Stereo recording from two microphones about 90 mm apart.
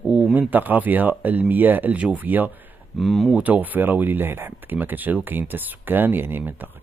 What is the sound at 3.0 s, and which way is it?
Speech, centre (ahead or behind).